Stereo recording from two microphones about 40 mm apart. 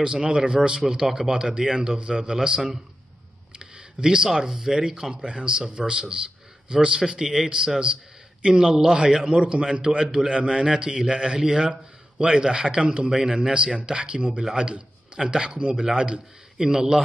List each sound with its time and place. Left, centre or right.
0.0 s a man's voice: right
8.6 s a man's voice: centre